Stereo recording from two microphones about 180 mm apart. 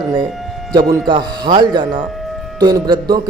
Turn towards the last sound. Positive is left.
turn(degrees=-20)  # may be behind; listen again after turning